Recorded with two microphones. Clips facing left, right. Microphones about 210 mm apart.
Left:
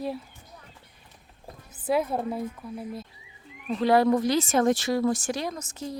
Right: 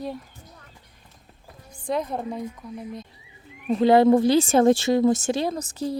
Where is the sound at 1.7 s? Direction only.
5° left (ahead or behind).